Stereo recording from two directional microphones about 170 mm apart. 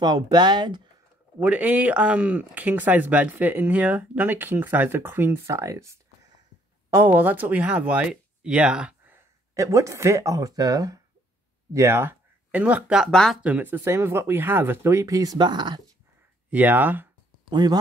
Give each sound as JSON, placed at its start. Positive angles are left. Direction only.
{"t": 0.0, "sound": "speech", "side_deg": -25}
{"t": 1.4, "sound": "speech", "side_deg": -10}
{"t": 7.2, "sound": "speech", "side_deg": -10}
{"t": 16.4, "sound": "speech", "side_deg": -10}
{"t": 17.5, "sound": "speech", "side_deg": -25}